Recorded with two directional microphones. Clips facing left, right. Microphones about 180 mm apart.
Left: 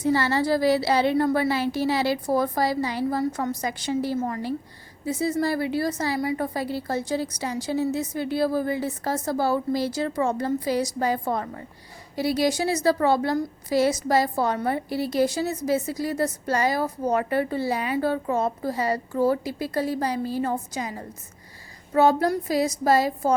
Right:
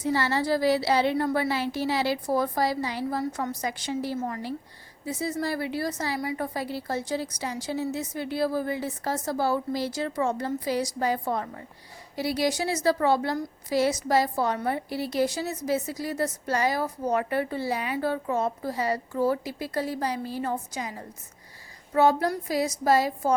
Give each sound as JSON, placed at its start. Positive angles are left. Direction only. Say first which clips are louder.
{"t": 0.0, "sound": "a woman's voice", "louder": "left 3 dB", "side_deg": 45}
{"t": 21.9, "sound": "a woman's voice", "louder": "left 2 dB", "side_deg": 35}